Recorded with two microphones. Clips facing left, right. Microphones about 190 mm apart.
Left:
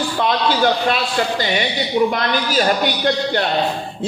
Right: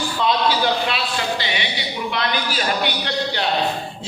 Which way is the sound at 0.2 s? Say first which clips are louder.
Left 2 dB; 50° left (ahead or behind).